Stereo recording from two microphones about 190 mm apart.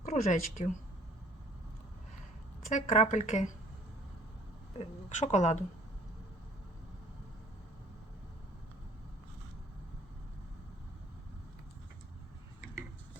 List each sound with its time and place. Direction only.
0.0 s speech: 40° left (ahead or behind)
2.6 s speech: 40° left (ahead or behind)
4.8 s speech: 35° left (ahead or behind)